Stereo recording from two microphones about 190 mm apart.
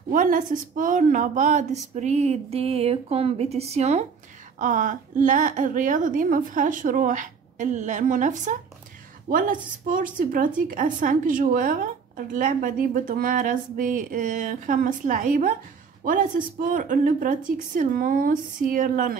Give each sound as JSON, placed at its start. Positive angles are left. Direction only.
{"t": 0.1, "sound": "a woman's voice", "side_deg": -45}